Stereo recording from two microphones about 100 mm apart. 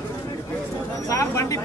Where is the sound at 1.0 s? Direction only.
30° left (ahead or behind).